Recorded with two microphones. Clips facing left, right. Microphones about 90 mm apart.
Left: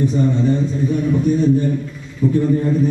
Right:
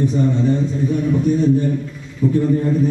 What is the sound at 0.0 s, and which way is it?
A man's voice, 15° left (ahead or behind).